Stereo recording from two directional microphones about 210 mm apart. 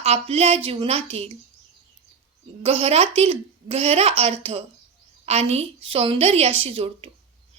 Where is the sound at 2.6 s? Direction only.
30° right (ahead or behind).